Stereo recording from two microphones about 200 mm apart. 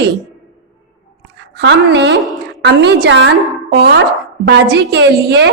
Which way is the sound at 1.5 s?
55° right (ahead or behind).